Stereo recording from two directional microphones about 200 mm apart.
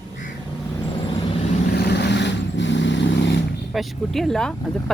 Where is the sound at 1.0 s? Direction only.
25° left (ahead or behind).